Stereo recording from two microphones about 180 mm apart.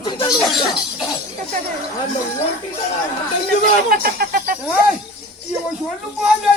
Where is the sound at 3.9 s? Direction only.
55° right (ahead or behind).